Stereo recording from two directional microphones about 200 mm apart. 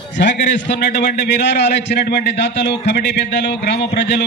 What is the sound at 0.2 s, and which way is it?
A man's voice, 60° left (ahead or behind).